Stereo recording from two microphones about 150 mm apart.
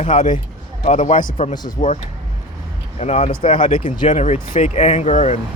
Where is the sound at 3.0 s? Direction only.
45° left (ahead or behind).